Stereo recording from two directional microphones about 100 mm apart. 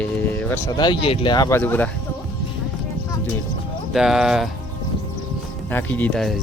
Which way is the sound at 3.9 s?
5° right (ahead or behind).